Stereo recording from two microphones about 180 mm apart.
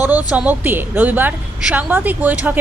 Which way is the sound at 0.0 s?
10° right (ahead or behind).